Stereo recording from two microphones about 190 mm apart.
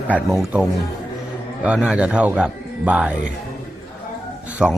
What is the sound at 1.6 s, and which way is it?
Speech, 5° right (ahead or behind).